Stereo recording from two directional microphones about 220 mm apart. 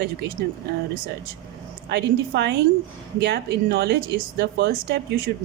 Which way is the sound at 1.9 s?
50° right (ahead or behind).